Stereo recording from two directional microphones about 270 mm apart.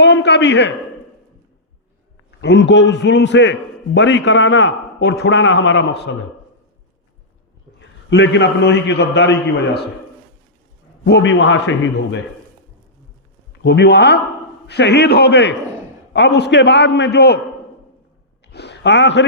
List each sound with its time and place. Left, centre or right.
0.0 s a man's voice: left
2.4 s a man's voice: left
7.8 s a man's voice: left
11.0 s a man's voice: left
13.6 s a man's voice: left
18.4 s a sound: left